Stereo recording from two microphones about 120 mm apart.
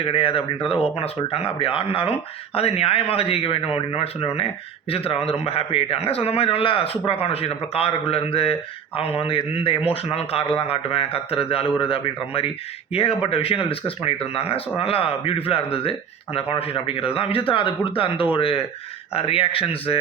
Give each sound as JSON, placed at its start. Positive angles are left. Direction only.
{"t": 0.0, "sound": "a man's voice", "side_deg": 50}